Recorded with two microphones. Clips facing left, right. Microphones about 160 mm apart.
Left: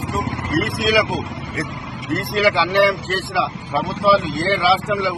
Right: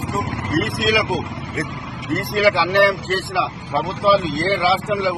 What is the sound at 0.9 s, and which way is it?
Speech, 20° right (ahead or behind).